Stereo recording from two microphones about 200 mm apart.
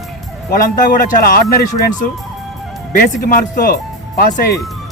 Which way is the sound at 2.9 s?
45° left (ahead or behind).